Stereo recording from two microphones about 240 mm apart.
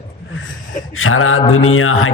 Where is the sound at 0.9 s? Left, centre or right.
Left.